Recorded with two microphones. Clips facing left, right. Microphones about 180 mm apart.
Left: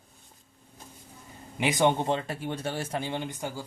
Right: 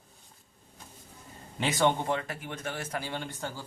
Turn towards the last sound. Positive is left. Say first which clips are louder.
# left 3 dB
turn(degrees=15)  # may be behind; listen again after turning